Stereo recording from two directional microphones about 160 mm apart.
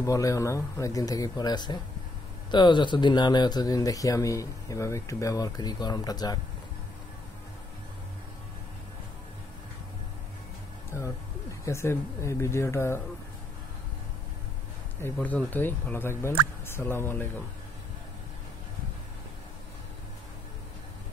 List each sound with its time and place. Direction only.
0.0 s speech: 20° left (ahead or behind)
11.6 s speech: 15° left (ahead or behind)
15.0 s speech: 10° left (ahead or behind)